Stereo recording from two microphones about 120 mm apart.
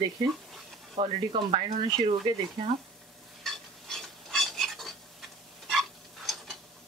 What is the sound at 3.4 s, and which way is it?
Stir, 5° left (ahead or behind).